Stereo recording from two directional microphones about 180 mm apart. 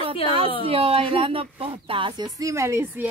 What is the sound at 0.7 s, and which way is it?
A woman's voice, 30° right (ahead or behind).